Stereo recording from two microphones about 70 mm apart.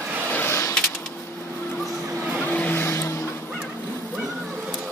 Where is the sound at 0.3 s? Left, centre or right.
Left.